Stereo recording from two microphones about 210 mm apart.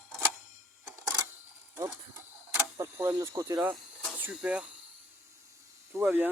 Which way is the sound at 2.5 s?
15° right (ahead or behind).